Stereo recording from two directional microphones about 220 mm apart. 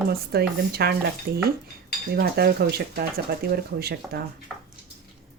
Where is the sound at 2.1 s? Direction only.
45° right (ahead or behind).